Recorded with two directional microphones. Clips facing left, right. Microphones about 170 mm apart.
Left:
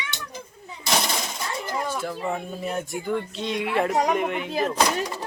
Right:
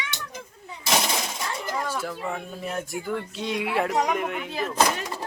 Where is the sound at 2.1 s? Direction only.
5° left (ahead or behind).